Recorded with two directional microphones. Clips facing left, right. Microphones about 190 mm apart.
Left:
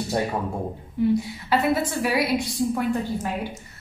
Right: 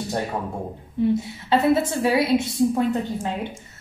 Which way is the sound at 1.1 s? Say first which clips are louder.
Right 1 dB; 25° right (ahead or behind).